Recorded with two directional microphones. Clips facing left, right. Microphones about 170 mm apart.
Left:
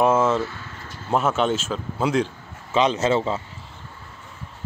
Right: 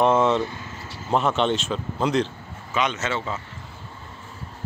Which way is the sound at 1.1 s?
5° left (ahead or behind).